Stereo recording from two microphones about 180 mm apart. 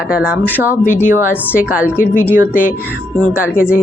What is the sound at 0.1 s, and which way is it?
Speech, 5° right (ahead or behind).